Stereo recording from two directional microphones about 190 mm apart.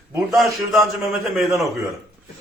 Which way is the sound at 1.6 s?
15° right (ahead or behind).